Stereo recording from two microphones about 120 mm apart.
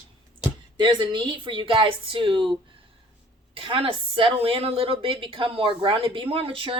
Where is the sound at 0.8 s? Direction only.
40° right (ahead or behind).